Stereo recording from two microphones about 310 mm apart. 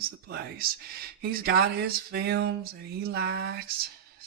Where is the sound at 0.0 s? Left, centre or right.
Right.